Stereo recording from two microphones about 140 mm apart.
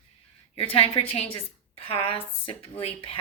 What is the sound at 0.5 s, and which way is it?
Speech, 40° left (ahead or behind).